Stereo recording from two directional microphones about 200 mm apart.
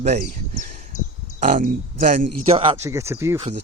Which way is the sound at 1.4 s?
40° right (ahead or behind).